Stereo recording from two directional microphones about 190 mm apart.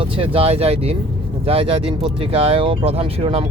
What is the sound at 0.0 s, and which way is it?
Speech, 30° right (ahead or behind).